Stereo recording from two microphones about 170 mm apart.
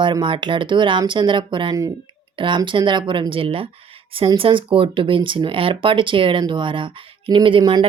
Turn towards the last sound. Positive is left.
turn(degrees=-30)  # may be behind; listen again after turning